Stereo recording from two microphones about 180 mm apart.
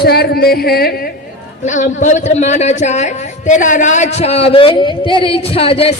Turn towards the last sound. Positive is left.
turn(degrees=35)  # may be behind; listen again after turning